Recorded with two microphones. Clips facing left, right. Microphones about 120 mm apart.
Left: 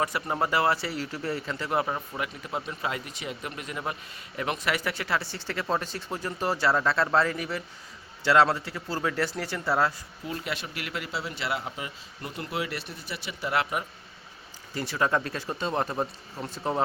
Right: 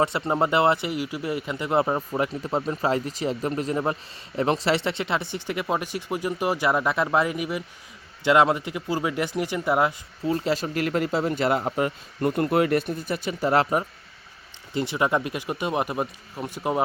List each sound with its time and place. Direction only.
0.0 s speech: 25° right (ahead or behind)
10.2 s speech: 35° right (ahead or behind)
14.7 s speech: 20° right (ahead or behind)